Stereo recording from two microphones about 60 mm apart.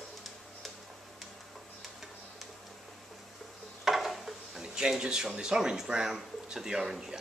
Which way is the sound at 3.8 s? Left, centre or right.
Centre.